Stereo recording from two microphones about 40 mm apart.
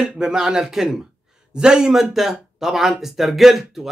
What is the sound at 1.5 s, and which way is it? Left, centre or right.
Speech, centre.